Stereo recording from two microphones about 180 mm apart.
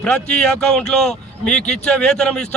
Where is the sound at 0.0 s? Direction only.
5° left (ahead or behind).